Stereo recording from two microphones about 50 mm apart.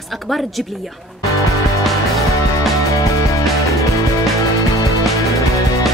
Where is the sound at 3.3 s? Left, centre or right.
Left.